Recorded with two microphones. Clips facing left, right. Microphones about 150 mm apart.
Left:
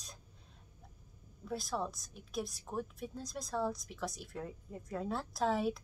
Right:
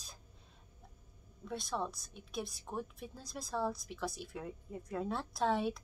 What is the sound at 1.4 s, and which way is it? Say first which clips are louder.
A woman's voice: left 1 dB; centre (ahead or behind).